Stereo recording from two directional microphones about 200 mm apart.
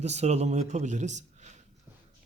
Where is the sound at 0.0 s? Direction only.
35° right (ahead or behind).